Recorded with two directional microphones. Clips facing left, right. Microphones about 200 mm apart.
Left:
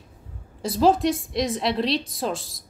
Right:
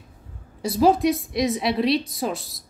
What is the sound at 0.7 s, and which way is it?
Speech, centre (ahead or behind).